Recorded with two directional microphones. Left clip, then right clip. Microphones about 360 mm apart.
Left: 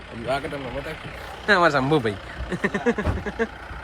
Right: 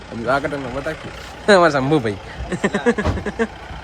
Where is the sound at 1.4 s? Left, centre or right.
Centre.